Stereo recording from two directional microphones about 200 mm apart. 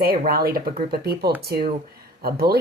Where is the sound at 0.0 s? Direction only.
50° right (ahead or behind).